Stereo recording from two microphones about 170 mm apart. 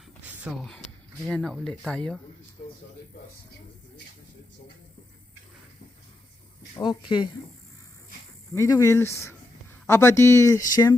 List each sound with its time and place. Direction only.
0.2 s a sound: 5° right (ahead or behind)
1.2 s speech: 5° left (ahead or behind)
6.7 s speech: 25° left (ahead or behind)
8.5 s speech: 20° left (ahead or behind)